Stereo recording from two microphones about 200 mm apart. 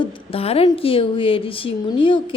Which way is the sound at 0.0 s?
30° left (ahead or behind).